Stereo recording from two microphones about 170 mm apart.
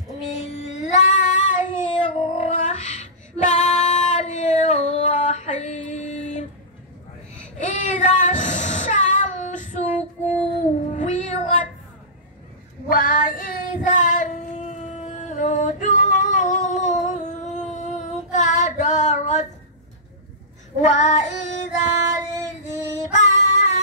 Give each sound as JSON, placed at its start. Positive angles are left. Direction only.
{"t": 0.4, "sound": "child singing", "side_deg": 40}
{"t": 2.3, "sound": "female singing", "side_deg": 40}
{"t": 7.5, "sound": "child singing", "side_deg": 45}
{"t": 10.9, "sound": "cat", "side_deg": 45}
{"t": 12.9, "sound": "child singing", "side_deg": 60}
{"t": 20.8, "sound": "child singing", "side_deg": 40}